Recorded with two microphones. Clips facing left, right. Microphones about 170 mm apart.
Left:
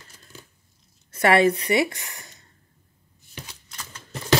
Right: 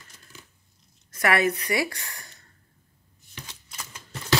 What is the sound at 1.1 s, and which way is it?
A woman's voice, 30° left (ahead or behind).